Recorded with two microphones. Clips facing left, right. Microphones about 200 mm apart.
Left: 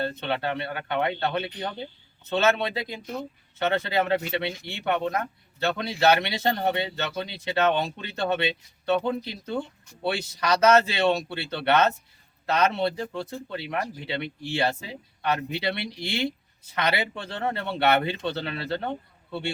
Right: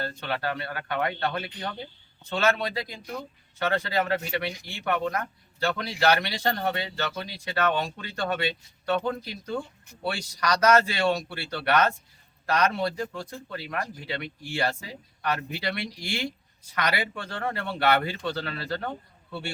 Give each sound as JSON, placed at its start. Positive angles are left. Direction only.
{"t": 0.0, "sound": "a man's voice", "side_deg": 25}